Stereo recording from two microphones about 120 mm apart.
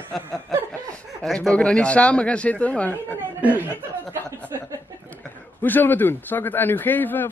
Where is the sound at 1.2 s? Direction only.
5° left (ahead or behind).